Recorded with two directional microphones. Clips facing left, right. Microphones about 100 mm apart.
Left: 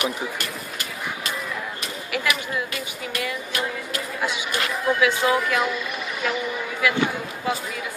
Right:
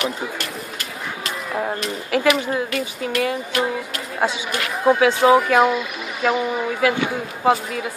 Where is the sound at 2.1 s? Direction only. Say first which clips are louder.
Right 8 dB; 40° right (ahead or behind).